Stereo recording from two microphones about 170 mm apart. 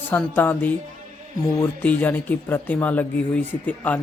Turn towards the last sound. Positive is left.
turn(degrees=10)  # may be behind; listen again after turning